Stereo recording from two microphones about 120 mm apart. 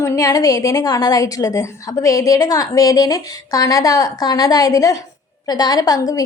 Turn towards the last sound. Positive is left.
turn(degrees=30)  # may be behind; listen again after turning